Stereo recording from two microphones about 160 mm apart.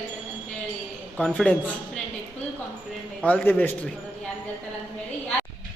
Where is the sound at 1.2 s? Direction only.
Centre (ahead or behind).